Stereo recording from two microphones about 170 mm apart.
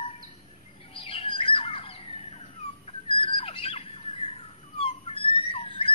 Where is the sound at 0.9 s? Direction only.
35° left (ahead or behind).